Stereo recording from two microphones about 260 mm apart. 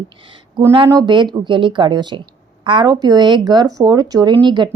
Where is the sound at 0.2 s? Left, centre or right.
Centre.